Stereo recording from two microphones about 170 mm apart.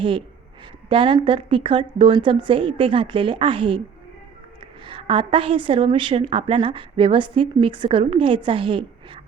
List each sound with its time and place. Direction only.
0.9 s a woman's voice: 30° right (ahead or behind)
4.9 s a woman's voice: 30° right (ahead or behind)